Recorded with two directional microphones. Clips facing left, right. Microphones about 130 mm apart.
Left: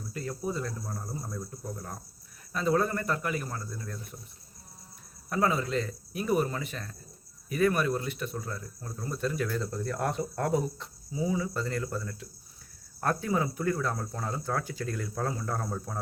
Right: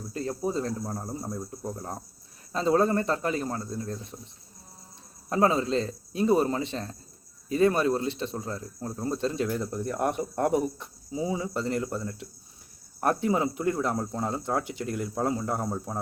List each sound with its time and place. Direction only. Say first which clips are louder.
0.1 s speech: right 4 dB; 30° right (ahead or behind)
5.3 s speech: right 4 dB; 30° right (ahead or behind)